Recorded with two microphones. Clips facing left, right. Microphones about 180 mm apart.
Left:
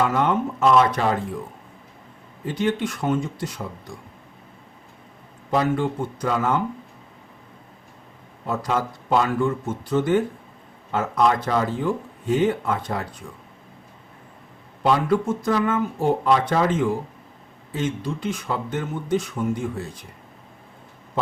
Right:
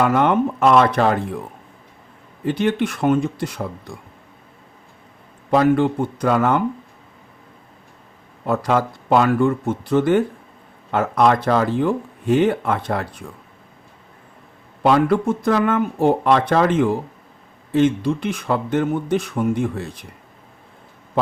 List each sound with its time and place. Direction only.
0.0 s speech: 65° right (ahead or behind)
2.5 s speech: 65° right (ahead or behind)
5.5 s speech: 70° right (ahead or behind)
8.4 s speech: 70° right (ahead or behind)
14.8 s speech: 70° right (ahead or behind)